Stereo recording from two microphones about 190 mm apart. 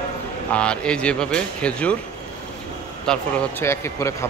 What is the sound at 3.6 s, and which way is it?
Speech, 15° left (ahead or behind).